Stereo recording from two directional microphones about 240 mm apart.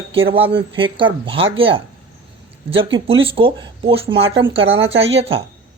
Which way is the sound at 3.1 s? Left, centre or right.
Right.